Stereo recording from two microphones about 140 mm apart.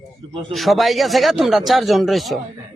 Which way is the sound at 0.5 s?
Centre (ahead or behind).